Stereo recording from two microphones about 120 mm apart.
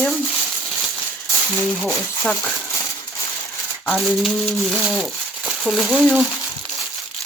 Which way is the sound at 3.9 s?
Centre (ahead or behind).